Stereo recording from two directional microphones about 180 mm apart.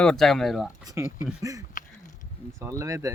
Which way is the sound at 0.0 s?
5° left (ahead or behind).